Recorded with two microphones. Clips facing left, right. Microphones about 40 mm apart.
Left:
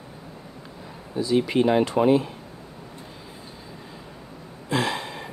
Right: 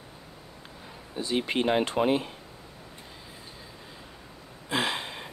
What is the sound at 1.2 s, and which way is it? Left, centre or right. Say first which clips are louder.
Speech: left 6 dB; right.